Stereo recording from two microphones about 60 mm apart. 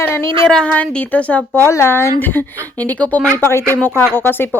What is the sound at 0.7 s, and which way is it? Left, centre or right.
Speech, left.